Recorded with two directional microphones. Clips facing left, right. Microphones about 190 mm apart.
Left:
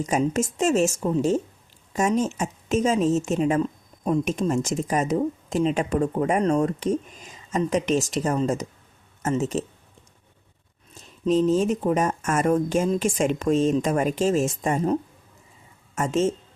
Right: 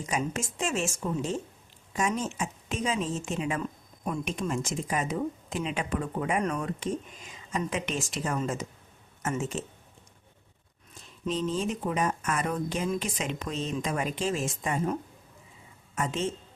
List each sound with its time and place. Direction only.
0.0 s speech: 45° left (ahead or behind)
11.3 s speech: 45° left (ahead or behind)
16.0 s speech: 45° left (ahead or behind)